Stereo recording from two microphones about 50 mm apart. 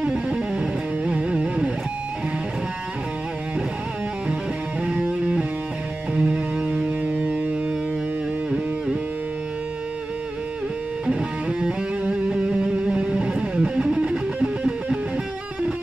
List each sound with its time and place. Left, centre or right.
0.0 s music: centre
4.8 s music: right
11.1 s music: centre